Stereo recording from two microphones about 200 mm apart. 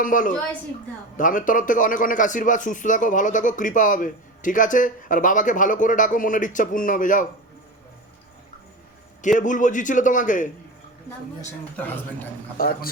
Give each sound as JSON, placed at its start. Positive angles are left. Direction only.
{"t": 0.0, "sound": "a man's voice", "side_deg": 40}
{"t": 9.2, "sound": "a man's voice", "side_deg": 40}
{"t": 11.8, "sound": "a man's voice", "side_deg": 10}
{"t": 12.5, "sound": "a man's voice", "side_deg": 50}